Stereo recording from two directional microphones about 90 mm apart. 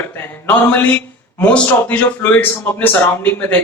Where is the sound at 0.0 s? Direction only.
20° left (ahead or behind).